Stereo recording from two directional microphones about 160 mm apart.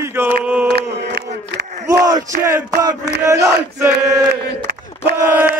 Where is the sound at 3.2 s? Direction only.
20° right (ahead or behind).